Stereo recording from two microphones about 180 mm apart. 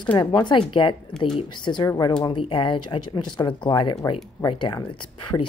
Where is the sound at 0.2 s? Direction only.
25° left (ahead or behind).